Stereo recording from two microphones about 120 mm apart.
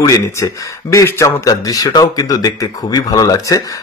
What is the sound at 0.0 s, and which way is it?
Speech, 25° left (ahead or behind).